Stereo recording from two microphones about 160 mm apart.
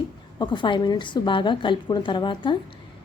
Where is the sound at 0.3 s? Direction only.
30° left (ahead or behind).